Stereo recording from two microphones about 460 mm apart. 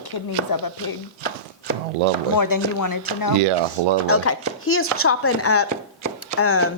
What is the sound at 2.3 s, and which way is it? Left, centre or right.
Speech, left.